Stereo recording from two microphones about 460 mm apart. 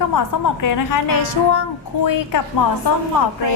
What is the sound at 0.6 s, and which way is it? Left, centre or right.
A woman's voice, left.